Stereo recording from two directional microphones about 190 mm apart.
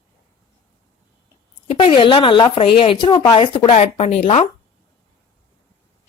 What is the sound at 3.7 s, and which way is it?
Speech, 35° left (ahead or behind).